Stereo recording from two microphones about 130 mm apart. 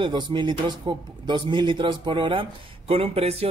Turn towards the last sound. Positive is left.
turn(degrees=-50)  # may be behind; listen again after turning